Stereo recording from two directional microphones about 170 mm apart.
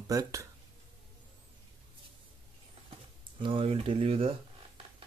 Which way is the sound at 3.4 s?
30° right (ahead or behind).